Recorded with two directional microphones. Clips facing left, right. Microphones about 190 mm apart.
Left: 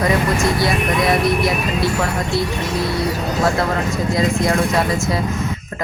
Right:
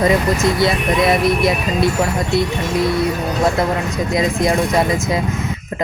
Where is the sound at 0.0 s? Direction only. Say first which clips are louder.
Right 2 dB; 25° right (ahead or behind).